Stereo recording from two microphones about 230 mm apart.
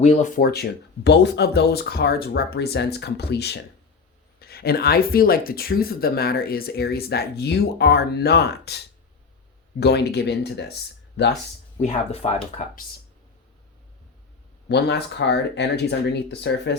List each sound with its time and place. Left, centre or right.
0.0 s speech: left
9.8 s speech: left
11.8 s speech: left
14.7 s speech: left